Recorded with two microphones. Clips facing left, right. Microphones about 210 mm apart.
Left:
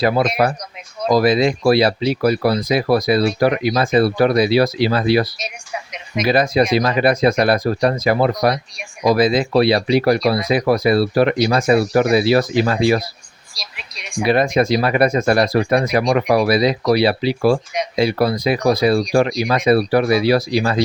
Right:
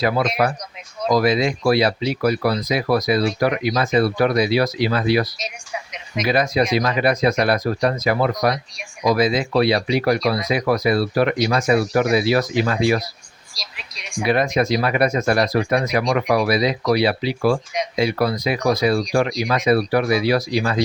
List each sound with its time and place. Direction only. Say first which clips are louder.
0.0 s speech: left 3 dB; 30° left (ahead or behind)
14.3 s speech: left 3 dB; 30° left (ahead or behind)